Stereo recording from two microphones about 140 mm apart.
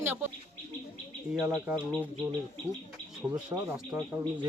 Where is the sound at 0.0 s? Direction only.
15° right (ahead or behind).